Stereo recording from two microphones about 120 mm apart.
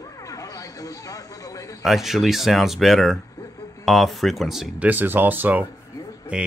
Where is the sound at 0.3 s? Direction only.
30° left (ahead or behind).